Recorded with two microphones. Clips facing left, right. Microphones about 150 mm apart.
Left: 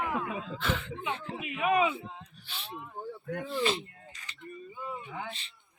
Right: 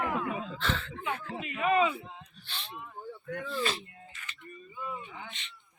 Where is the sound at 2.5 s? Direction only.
10° left (ahead or behind).